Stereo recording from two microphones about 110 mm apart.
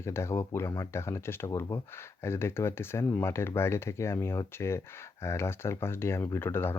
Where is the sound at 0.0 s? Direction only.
25° left (ahead or behind).